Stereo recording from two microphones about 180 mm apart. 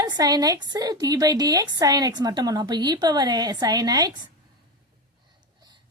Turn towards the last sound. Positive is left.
turn(degrees=-20)  # may be behind; listen again after turning